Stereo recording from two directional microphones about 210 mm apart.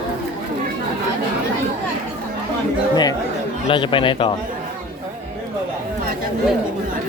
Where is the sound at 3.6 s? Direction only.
25° left (ahead or behind).